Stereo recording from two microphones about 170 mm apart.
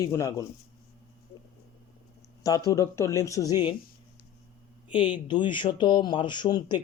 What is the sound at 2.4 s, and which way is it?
Speech, 20° left (ahead or behind).